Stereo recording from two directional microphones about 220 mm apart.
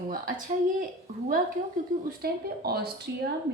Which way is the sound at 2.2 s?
45° right (ahead or behind).